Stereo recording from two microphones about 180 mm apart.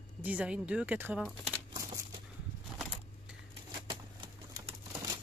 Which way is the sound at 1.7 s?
20° right (ahead or behind).